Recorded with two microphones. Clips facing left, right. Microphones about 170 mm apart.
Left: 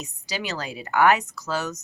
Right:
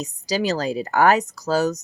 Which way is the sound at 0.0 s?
40° right (ahead or behind).